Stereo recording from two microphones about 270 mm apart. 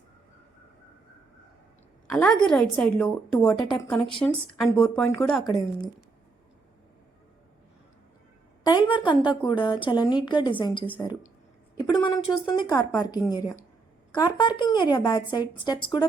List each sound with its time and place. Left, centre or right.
2.0 s a woman's voice: centre
8.6 s a woman's voice: centre